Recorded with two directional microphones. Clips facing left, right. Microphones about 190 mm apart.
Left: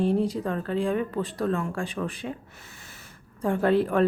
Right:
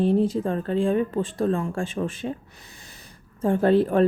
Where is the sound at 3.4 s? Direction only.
30° right (ahead or behind).